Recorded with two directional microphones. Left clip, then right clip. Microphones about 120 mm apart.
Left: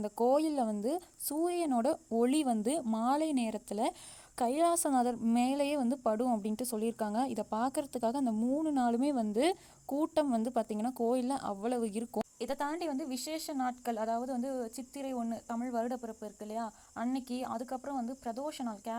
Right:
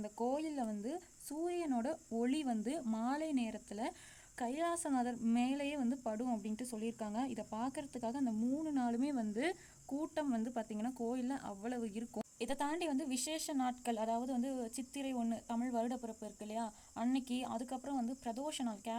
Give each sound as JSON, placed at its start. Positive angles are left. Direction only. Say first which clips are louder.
{"t": 0.0, "sound": "speech", "louder": "left 10 dB", "side_deg": 55}
{"t": 12.5, "sound": "speech", "louder": "left 1 dB", "side_deg": 15}